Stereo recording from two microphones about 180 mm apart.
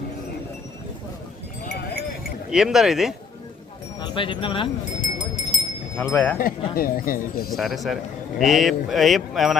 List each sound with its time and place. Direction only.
2.5 s speech: 5° right (ahead or behind)
4.0 s speech: 30° left (ahead or behind)
4.9 s a sound: 40° left (ahead or behind)
6.0 s speech: 5° left (ahead or behind)
6.4 s speech: 55° left (ahead or behind)
7.5 s speech: centre (ahead or behind)